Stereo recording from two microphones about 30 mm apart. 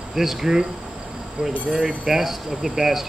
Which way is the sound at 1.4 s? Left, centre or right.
Right.